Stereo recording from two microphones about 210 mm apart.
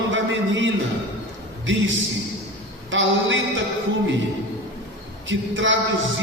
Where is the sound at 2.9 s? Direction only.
65° right (ahead or behind).